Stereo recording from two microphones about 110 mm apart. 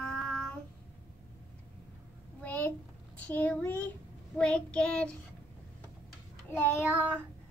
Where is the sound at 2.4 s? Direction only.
20° left (ahead or behind).